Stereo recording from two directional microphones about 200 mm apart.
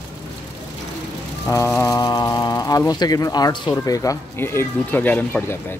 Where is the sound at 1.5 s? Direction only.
15° left (ahead or behind).